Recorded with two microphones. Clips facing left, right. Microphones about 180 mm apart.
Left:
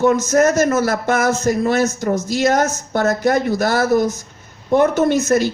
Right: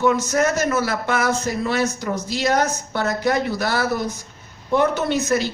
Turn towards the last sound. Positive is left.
turn(degrees=45)  # may be behind; listen again after turning